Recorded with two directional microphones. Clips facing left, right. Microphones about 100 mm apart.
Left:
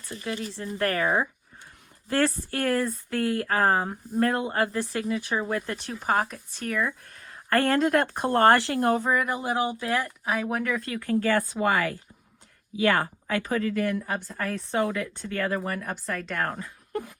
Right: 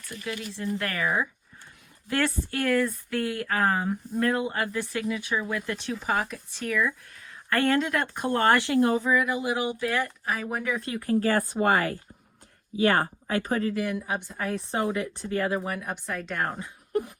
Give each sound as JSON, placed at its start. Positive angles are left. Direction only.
{"t": 0.1, "sound": "speech", "side_deg": 30}
{"t": 1.0, "sound": "speech", "side_deg": 25}
{"t": 2.0, "sound": "speech", "side_deg": 35}
{"t": 10.2, "sound": "speech", "side_deg": 0}
{"t": 10.8, "sound": "speech", "side_deg": -25}
{"t": 13.8, "sound": "speech", "side_deg": -15}
{"t": 14.7, "sound": "speech", "side_deg": -25}
{"t": 16.5, "sound": "speech", "side_deg": -25}